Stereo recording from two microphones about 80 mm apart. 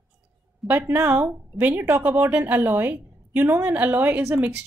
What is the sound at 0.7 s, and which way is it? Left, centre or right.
A woman's voice, right.